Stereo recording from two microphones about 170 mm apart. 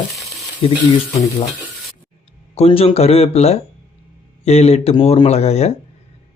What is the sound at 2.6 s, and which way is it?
Speech, 35° left (ahead or behind).